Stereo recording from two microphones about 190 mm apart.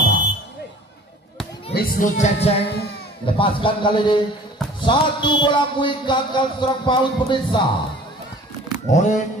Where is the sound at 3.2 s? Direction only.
25° left (ahead or behind).